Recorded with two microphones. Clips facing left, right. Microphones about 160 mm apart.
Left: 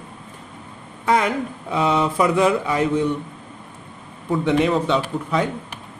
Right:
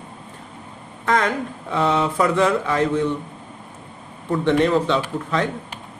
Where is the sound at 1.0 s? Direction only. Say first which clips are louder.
Left 1 dB; 10° left (ahead or behind).